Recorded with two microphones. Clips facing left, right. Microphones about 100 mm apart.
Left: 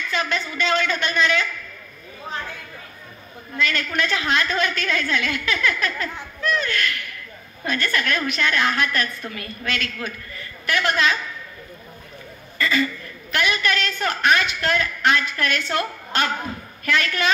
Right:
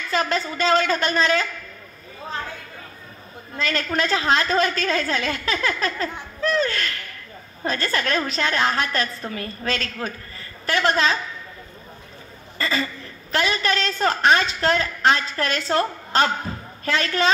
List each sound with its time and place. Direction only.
0.1 s a woman's voice: 35° right (ahead or behind)
3.5 s a woman's voice: 35° right (ahead or behind)
12.5 s a woman's voice: 30° right (ahead or behind)